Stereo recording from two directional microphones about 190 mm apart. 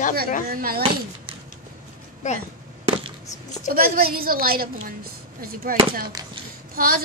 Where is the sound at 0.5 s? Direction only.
50° right (ahead or behind).